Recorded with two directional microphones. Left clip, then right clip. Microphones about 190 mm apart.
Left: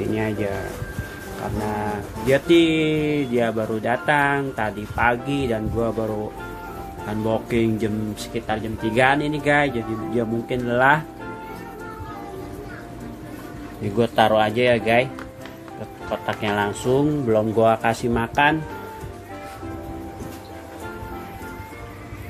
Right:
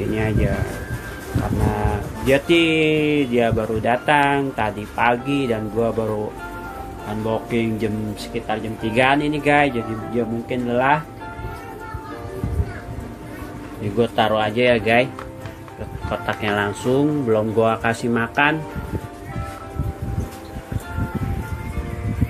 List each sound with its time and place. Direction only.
0.1 s speech: 5° left (ahead or behind)
1.7 s speech: centre (ahead or behind)
7.2 s speech: 20° left (ahead or behind)
10.1 s speech: 15° left (ahead or behind)
13.9 s speech: 15° left (ahead or behind)
16.1 s speech: 5° left (ahead or behind)